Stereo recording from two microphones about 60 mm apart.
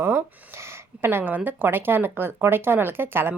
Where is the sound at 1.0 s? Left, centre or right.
Right.